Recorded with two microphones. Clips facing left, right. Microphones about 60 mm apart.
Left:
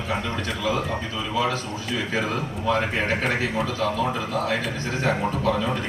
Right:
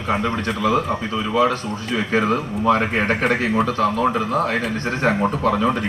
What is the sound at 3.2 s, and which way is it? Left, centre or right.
Speech, right.